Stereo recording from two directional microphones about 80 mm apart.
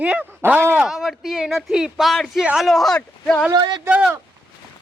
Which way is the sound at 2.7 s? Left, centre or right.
Centre.